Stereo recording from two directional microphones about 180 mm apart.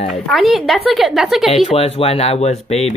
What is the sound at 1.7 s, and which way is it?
Speech, 35° left (ahead or behind).